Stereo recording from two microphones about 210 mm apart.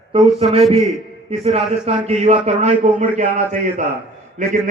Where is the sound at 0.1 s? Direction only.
25° right (ahead or behind).